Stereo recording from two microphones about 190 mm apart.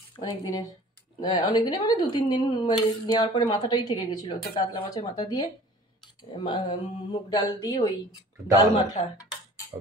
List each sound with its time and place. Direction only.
0.1 s speech: 20° left (ahead or behind)